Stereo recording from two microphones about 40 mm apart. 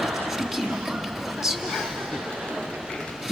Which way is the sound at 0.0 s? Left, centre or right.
Centre.